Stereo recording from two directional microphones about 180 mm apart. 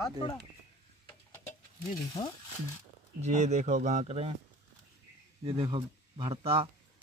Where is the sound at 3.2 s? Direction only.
40° right (ahead or behind).